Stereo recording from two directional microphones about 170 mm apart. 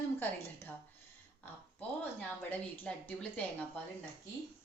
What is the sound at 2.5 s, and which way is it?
A woman's voice, 10° left (ahead or behind).